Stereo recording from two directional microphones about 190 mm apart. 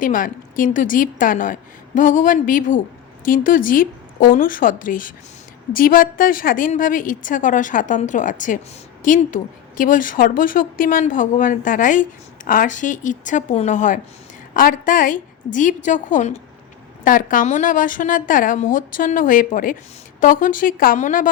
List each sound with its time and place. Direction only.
0.0 s a woman's voice: 45° left (ahead or behind)